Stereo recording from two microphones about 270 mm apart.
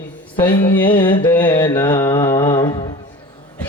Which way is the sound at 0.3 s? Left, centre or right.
Centre.